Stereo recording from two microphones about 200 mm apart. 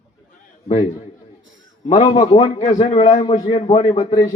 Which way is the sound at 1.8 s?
25° left (ahead or behind).